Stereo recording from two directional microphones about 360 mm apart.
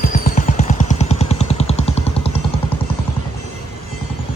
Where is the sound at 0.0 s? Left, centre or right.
Left.